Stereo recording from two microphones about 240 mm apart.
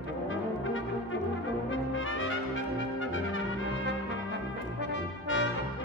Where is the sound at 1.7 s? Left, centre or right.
Left.